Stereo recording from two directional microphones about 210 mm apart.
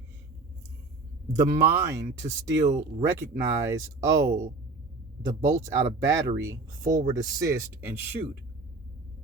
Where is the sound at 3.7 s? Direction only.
15° right (ahead or behind).